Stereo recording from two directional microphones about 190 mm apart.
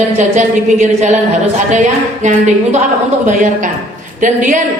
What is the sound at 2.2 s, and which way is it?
Speech, 40° right (ahead or behind).